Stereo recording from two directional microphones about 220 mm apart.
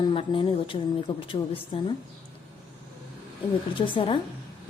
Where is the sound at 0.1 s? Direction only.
25° left (ahead or behind).